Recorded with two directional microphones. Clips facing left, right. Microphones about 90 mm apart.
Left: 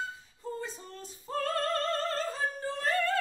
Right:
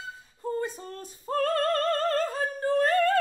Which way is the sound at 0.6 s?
50° right (ahead or behind).